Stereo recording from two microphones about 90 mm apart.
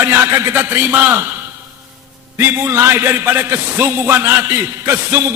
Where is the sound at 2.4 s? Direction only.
25° right (ahead or behind).